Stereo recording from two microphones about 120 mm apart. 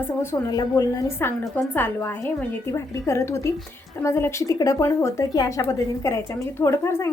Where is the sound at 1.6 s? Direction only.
20° left (ahead or behind).